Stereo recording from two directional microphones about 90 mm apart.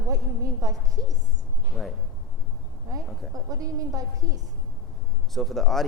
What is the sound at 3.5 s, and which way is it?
Speech, 40° right (ahead or behind).